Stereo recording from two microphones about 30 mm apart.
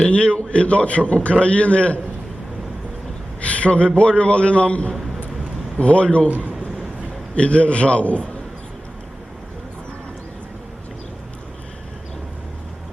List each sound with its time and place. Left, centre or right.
0.1 s a man's voice: left
3.4 s a sound: left
3.8 s a man's voice: left
7.3 s a man's voice: left